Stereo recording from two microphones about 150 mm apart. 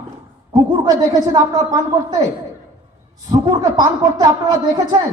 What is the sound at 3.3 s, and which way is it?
A woman's voice, 25° right (ahead or behind).